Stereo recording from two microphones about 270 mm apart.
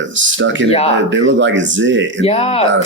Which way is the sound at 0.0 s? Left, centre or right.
Right.